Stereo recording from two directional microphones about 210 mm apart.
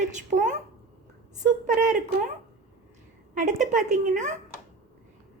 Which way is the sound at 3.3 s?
35° right (ahead or behind).